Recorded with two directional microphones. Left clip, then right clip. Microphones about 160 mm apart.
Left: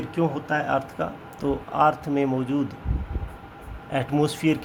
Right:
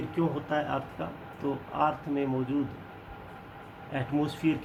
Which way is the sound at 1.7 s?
90° left.